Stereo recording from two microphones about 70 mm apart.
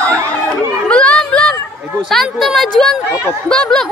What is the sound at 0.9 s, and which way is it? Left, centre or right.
Children playing, centre.